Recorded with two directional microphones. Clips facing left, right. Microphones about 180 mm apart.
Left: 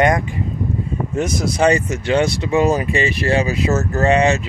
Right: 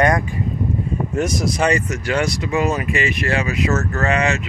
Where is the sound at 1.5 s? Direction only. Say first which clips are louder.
Left 3 dB; 30° left (ahead or behind).